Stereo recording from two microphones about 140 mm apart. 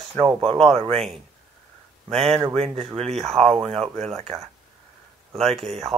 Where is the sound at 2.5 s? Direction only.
45° right (ahead or behind).